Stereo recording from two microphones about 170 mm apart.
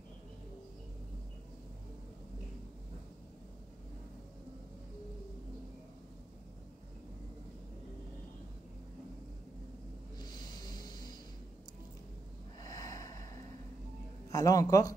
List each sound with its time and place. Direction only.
10.1 s a sound: 25° left (ahead or behind)
12.6 s snort: 20° left (ahead or behind)
14.3 s a man's voice: 20° left (ahead or behind)